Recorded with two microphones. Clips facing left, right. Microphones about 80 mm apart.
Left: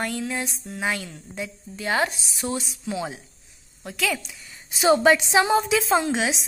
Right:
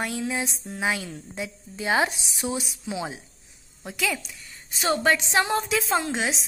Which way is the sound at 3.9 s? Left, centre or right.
Centre.